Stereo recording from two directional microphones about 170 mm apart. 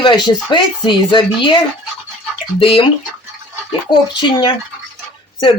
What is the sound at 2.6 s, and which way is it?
Speech, 30° left (ahead or behind).